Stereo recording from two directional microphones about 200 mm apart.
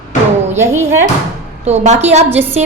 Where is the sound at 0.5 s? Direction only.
15° right (ahead or behind).